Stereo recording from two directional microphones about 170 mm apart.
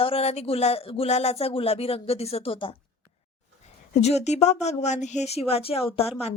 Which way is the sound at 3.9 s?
40° left (ahead or behind).